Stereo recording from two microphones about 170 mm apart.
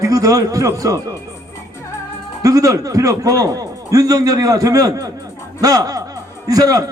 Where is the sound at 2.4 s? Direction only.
20° right (ahead or behind).